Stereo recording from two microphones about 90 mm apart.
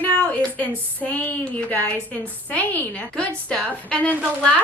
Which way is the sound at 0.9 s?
20° left (ahead or behind).